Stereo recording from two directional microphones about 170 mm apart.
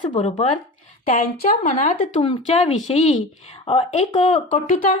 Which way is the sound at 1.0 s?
55° left (ahead or behind).